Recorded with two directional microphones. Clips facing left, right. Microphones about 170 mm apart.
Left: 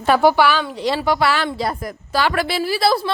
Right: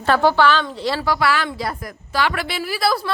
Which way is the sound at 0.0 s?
10° left (ahead or behind).